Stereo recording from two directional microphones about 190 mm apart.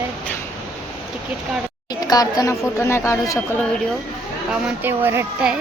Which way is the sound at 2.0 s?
20° left (ahead or behind).